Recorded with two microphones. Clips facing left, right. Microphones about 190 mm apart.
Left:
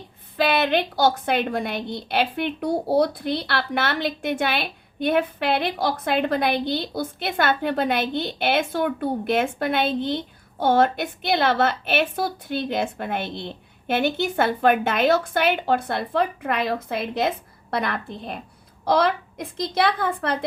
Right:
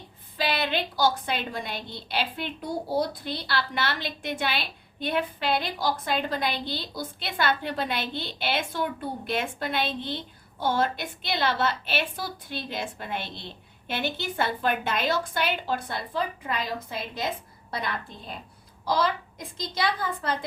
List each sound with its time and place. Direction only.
0.3 s a woman's voice: 55° left (ahead or behind)